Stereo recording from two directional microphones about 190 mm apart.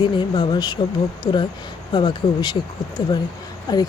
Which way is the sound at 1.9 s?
25° left (ahead or behind).